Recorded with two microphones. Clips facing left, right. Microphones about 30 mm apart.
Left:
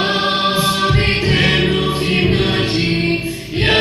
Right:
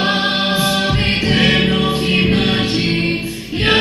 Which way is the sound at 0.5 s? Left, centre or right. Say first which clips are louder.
Even; centre.